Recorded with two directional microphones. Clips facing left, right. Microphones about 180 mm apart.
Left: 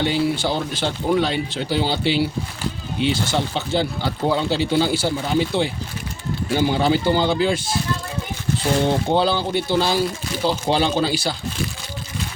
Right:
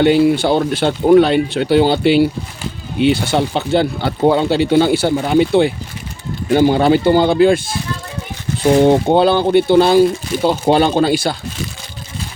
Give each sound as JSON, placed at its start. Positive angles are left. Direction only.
{"t": 0.0, "sound": "speech", "side_deg": -60}
{"t": 8.7, "sound": "speech", "side_deg": -55}